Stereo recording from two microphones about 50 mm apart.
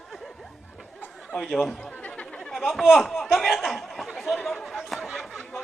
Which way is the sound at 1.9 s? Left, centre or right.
Left.